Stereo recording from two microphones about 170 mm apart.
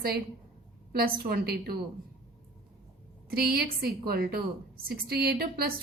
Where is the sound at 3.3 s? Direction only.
65° right (ahead or behind).